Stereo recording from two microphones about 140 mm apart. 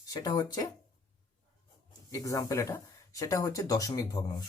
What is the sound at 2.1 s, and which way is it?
Speech, 25° left (ahead or behind).